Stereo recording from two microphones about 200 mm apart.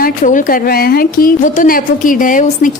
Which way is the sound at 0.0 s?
40° left (ahead or behind).